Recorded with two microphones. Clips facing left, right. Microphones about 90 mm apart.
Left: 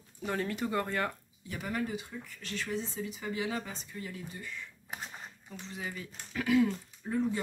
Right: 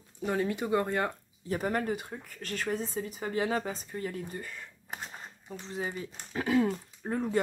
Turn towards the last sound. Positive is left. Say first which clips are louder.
# left 1 dB
turn(degrees=-55)  # may be behind; listen again after turning